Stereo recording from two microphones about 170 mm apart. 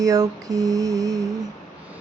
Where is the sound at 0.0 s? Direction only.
20° right (ahead or behind).